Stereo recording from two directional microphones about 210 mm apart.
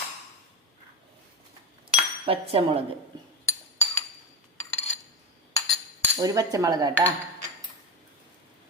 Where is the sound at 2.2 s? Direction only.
25° right (ahead or behind).